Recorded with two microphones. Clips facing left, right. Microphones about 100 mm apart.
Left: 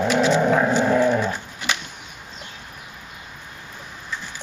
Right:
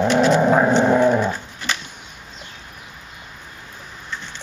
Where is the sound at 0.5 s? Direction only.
30° right (ahead or behind).